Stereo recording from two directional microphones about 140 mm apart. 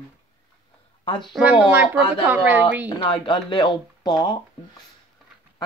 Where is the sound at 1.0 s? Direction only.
35° left (ahead or behind).